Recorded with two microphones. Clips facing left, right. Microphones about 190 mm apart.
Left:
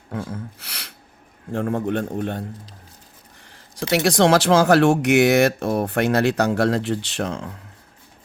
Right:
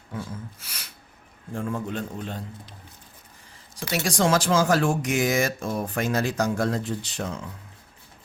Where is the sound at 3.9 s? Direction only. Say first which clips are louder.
Left 6 dB; 70° left (ahead or behind).